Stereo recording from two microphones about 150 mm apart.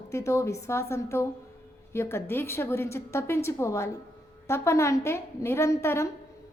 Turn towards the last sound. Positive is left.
turn(degrees=20)  # may be behind; listen again after turning